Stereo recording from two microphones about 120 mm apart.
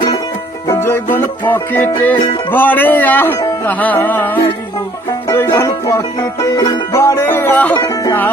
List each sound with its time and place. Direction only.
0.7 s music: 20° left (ahead or behind)
6.9 s speech: 25° left (ahead or behind)